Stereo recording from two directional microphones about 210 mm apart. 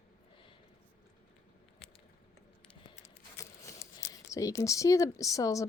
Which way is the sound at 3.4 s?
15° left (ahead or behind).